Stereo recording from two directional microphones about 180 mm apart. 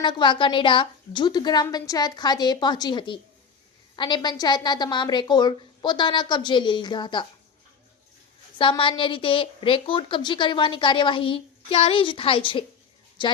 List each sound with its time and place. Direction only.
0.0 s a woman's voice: 25° left (ahead or behind)
8.5 s a woman's voice: 30° left (ahead or behind)